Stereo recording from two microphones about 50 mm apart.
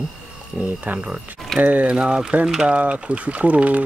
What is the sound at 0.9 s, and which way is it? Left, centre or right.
Speech, centre.